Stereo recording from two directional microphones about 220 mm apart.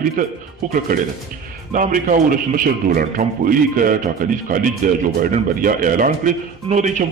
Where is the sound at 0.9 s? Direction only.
40° right (ahead or behind).